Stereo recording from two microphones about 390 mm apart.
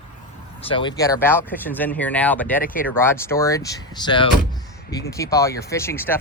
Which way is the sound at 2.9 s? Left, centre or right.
Centre.